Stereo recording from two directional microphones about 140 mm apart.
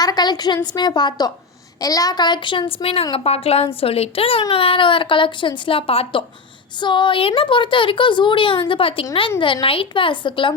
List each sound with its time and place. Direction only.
0.0 s a woman's voice: 30° left (ahead or behind)